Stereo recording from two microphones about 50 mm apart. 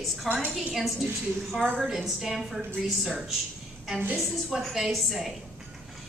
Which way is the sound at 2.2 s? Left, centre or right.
Centre.